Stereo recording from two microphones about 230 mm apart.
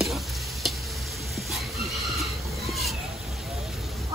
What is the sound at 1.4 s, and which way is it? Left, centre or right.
Chicken, centre.